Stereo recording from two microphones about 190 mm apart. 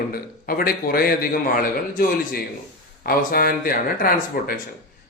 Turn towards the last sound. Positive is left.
turn(degrees=50)  # may be behind; listen again after turning